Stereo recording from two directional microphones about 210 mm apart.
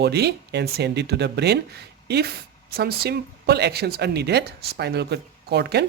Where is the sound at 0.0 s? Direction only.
50° right (ahead or behind).